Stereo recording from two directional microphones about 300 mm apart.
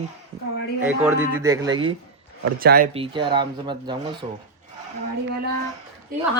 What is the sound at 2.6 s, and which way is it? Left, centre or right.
Speech, right.